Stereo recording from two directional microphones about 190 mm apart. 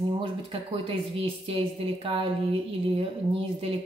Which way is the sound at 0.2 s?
30° right (ahead or behind).